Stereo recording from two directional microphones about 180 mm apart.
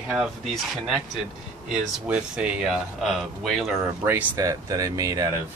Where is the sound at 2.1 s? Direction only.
5° right (ahead or behind).